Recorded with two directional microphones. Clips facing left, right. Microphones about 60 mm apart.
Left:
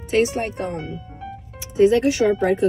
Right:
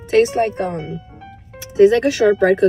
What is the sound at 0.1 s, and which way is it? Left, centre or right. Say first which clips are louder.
Speech: right 5 dB; right.